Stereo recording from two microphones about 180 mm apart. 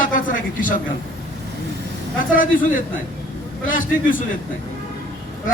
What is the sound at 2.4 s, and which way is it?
A man's voice, 50° left (ahead or behind).